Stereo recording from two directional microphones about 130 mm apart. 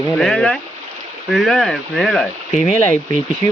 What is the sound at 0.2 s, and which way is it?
Speech, 5° left (ahead or behind).